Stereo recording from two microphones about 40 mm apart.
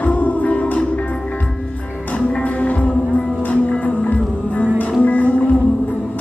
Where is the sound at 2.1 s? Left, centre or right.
Left.